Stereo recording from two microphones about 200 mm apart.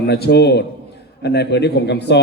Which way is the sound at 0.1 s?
55° left (ahead or behind).